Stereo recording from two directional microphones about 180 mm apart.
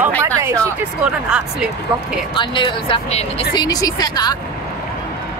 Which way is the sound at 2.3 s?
25° left (ahead or behind).